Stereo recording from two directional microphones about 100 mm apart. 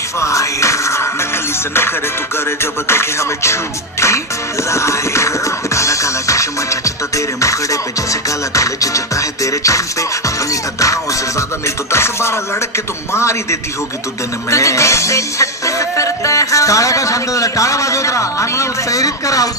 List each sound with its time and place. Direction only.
0.2 s music: 30° left (ahead or behind)
2.3 s music: 25° left (ahead or behind)